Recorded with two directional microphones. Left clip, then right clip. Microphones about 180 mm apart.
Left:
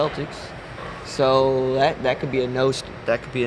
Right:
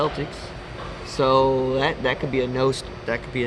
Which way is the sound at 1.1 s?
25° left (ahead or behind).